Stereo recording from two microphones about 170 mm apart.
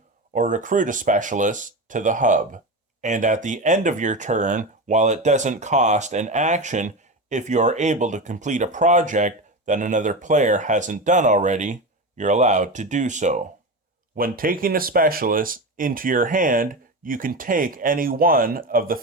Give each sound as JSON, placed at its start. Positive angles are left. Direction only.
{"t": 0.3, "sound": "speech", "side_deg": -50}
{"t": 14.2, "sound": "speech", "side_deg": -55}